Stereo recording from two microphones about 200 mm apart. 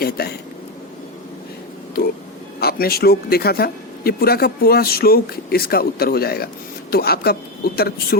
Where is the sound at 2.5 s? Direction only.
50° left (ahead or behind).